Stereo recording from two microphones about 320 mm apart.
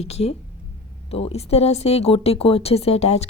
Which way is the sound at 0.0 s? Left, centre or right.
Centre.